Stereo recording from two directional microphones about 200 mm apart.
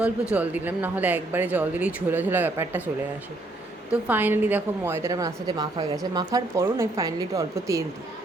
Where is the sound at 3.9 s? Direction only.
10° right (ahead or behind).